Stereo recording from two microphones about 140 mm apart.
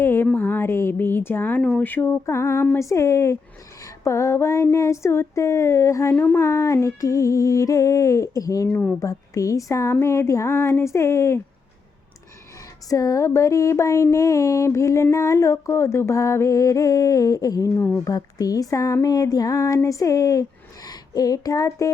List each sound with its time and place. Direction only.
0.0 s a sound: 15° left (ahead or behind)
0.3 s speech: 15° left (ahead or behind)
2.7 s female singing: 20° left (ahead or behind)
12.9 s female singing: 25° left (ahead or behind)
20.8 s speech: 25° left (ahead or behind)